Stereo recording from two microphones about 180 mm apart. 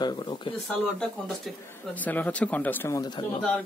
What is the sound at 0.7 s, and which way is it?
Speech, centre (ahead or behind).